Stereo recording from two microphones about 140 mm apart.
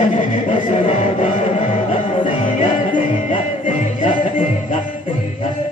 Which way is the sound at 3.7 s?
65° left (ahead or behind).